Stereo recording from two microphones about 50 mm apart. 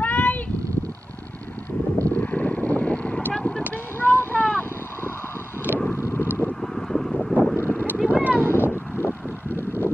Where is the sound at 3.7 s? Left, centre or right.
Left.